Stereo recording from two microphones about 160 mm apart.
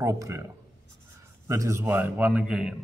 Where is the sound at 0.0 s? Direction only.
20° right (ahead or behind).